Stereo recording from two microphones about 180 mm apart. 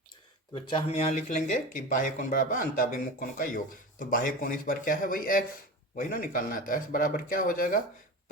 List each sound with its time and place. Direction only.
0.5 s speech: 35° left (ahead or behind); by 7.8 s 50° left (ahead or behind)